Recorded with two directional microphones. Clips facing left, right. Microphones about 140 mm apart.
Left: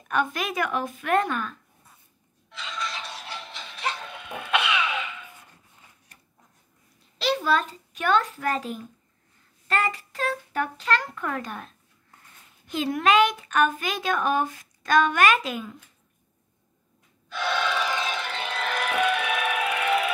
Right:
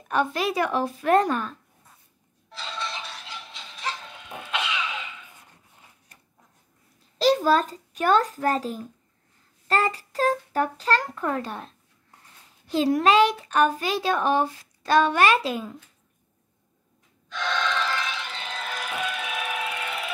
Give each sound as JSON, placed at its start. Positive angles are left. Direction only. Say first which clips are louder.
{"t": 0.1, "sound": "a woman's voice", "louder": "right 2 dB", "side_deg": -30}
{"t": 2.5, "sound": "a sound", "louder": "even", "side_deg": -30}
{"t": 3.3, "sound": "a sound", "louder": "left 3 dB", "side_deg": 65}
{"t": 7.4, "sound": "a woman's voice", "louder": "right 3 dB", "side_deg": -40}
{"t": 17.3, "sound": "music", "louder": "left 1 dB", "side_deg": 10}
{"t": 18.1, "sound": "music", "louder": "left 4 dB", "side_deg": 60}